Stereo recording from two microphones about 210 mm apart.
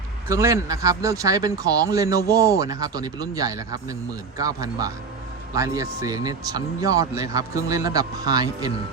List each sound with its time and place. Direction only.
0.3 s speech: 15° right (ahead or behind)